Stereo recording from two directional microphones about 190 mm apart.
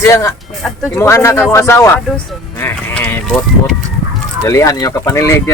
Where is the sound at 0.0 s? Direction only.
15° left (ahead or behind).